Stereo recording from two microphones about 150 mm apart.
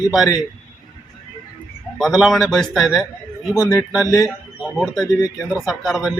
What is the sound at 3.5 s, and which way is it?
Speech, 20° left (ahead or behind).